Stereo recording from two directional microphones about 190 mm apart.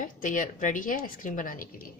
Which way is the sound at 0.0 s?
45° left (ahead or behind).